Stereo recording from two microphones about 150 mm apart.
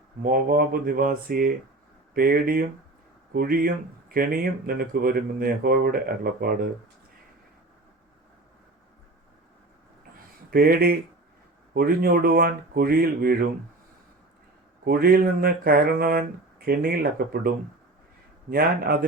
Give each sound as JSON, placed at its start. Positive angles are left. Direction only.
{"t": 0.2, "sound": "speech", "side_deg": -75}
{"t": 10.5, "sound": "speech", "side_deg": -90}
{"t": 11.7, "sound": "speech", "side_deg": -80}
{"t": 14.8, "sound": "speech", "side_deg": -90}
{"t": 18.5, "sound": "speech", "side_deg": -90}